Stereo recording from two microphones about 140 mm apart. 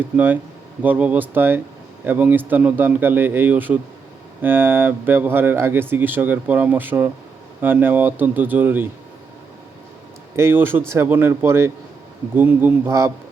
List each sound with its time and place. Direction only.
0.0 s speech: 15° right (ahead or behind)
10.3 s speech: 15° right (ahead or behind)